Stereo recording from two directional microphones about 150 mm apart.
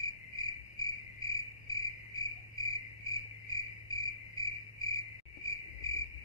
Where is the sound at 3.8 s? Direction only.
25° left (ahead or behind).